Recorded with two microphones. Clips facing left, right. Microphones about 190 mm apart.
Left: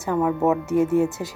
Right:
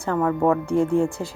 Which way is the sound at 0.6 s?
20° left (ahead or behind).